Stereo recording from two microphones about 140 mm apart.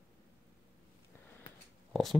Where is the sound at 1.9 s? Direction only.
Centre (ahead or behind).